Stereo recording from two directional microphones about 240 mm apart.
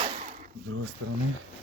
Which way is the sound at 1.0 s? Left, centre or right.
Right.